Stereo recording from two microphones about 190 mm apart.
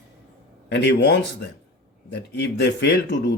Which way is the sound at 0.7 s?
65° left (ahead or behind).